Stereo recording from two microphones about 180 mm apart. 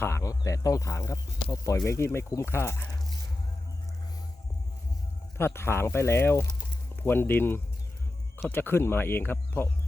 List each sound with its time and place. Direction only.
0.0 s speech: 15° left (ahead or behind)
5.4 s speech: 15° left (ahead or behind)